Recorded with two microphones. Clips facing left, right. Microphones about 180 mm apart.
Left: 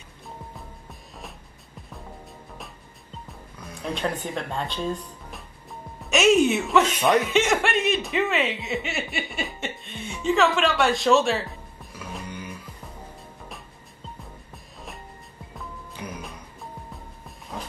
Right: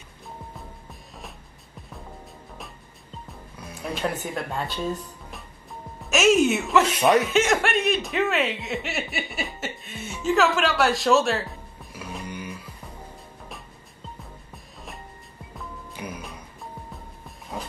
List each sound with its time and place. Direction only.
3.5 s music: 5° right (ahead or behind)
7.2 s speech: centre (ahead or behind)
14.5 s music: centre (ahead or behind)